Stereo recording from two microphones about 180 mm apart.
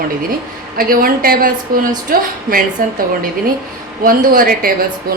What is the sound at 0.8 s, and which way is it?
A woman's voice, 55° right (ahead or behind).